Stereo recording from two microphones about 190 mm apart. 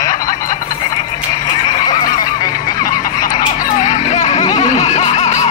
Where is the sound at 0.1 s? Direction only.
45° left (ahead or behind).